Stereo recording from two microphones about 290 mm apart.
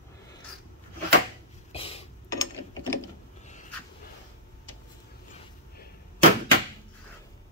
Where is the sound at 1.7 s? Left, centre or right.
Centre.